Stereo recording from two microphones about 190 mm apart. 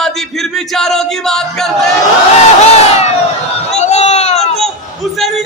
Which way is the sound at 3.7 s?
35° left (ahead or behind).